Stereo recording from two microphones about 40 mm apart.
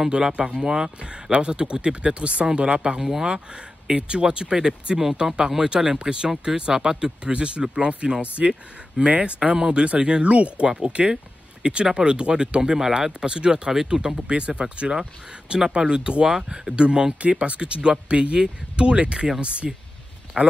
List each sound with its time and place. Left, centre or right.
0.1 s speech: right
3.0 s speech: centre
3.9 s speech: right
10.7 s speech: right